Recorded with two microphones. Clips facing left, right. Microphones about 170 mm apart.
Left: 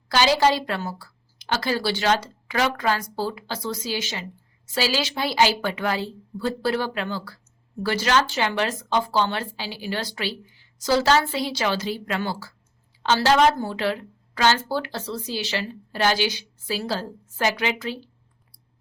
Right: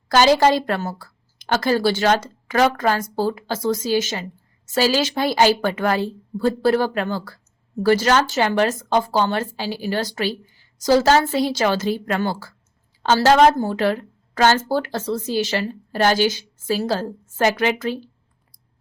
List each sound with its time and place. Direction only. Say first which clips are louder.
0.1 s a woman's voice: right 5 dB; 45° right (ahead or behind)